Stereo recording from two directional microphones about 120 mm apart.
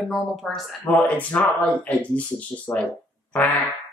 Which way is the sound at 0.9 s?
15° left (ahead or behind).